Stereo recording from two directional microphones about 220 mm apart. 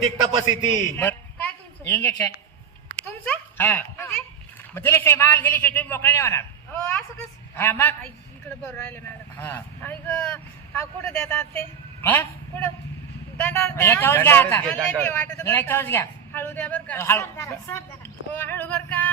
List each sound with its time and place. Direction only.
0.0 s a man's voice: 25° right (ahead or behind)
0.9 s a sound: 10° left (ahead or behind)
3.0 s a child's voice: 10° left (ahead or behind)